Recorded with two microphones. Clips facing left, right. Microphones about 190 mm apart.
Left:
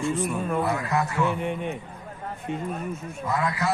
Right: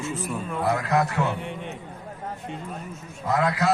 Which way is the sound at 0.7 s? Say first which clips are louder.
Right 3 dB; 70° right (ahead or behind).